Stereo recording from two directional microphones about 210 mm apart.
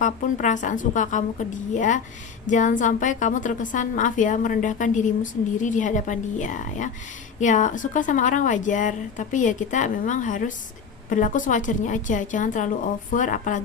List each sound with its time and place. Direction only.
0.0 s a woman's voice: 35° left (ahead or behind)